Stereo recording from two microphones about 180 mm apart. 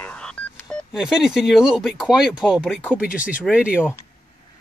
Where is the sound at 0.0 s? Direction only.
5° left (ahead or behind).